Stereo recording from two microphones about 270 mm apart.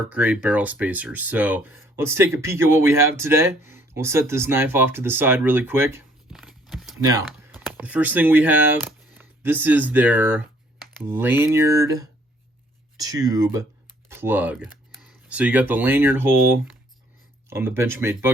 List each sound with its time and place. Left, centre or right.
0.1 s speech: centre
7.0 s speech: centre